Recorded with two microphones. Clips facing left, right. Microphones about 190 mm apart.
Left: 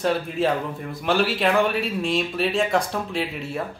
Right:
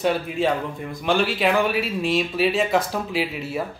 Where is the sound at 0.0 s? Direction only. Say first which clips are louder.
Right 1 dB; centre (ahead or behind).